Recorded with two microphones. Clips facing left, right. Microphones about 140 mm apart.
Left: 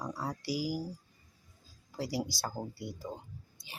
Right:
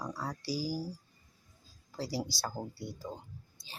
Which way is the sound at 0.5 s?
35° right (ahead or behind).